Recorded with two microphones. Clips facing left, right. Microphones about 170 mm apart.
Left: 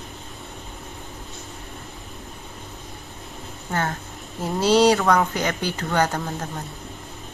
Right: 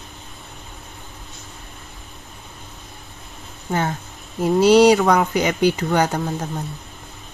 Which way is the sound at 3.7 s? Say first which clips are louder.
Right 3 dB; 15° right (ahead or behind).